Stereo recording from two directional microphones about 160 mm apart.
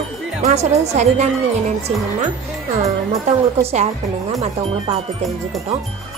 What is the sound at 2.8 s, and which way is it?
Speech, 45° right (ahead or behind).